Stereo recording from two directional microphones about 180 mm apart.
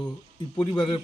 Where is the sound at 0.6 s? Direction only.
25° left (ahead or behind).